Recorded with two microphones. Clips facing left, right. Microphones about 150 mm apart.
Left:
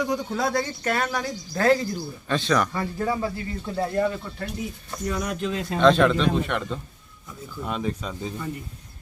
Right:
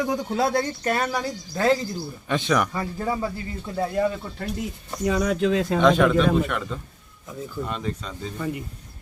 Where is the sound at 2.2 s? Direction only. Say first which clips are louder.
Even; 15° right (ahead or behind).